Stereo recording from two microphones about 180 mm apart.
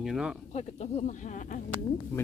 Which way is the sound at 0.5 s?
35° left (ahead or behind).